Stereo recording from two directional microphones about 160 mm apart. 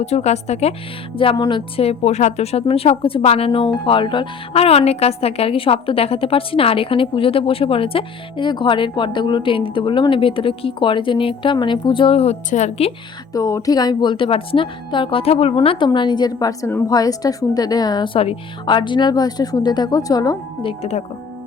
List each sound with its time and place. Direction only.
0.0 s speech: 45° left (ahead or behind)
1.1 s a woman's voice: 35° left (ahead or behind)
13.3 s a woman's voice: 20° left (ahead or behind); by 21.0 s 40° left (ahead or behind)